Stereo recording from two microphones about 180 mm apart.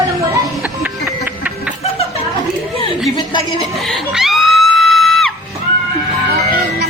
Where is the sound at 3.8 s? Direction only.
Centre (ahead or behind).